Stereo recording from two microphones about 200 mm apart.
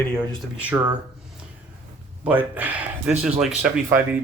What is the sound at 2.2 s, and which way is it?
Speech, 10° right (ahead or behind).